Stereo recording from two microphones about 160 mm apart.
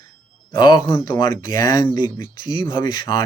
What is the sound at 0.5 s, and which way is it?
Speech, 25° left (ahead or behind).